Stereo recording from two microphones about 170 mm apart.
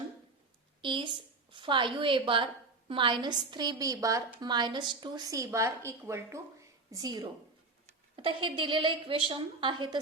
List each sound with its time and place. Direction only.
0.8 s a woman's voice: 30° right (ahead or behind)